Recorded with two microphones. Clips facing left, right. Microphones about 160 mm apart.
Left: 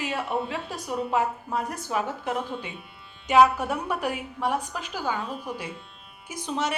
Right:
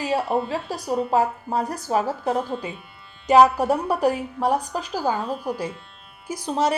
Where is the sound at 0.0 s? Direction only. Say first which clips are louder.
Right 6 dB; 35° right (ahead or behind).